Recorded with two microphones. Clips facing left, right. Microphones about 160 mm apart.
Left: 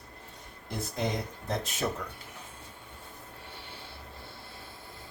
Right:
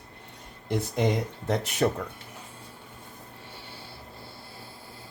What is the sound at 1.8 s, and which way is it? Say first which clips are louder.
Speech: right 8 dB; 60° right (ahead or behind).